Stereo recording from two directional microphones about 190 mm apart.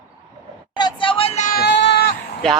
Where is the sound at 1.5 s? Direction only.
60° left (ahead or behind).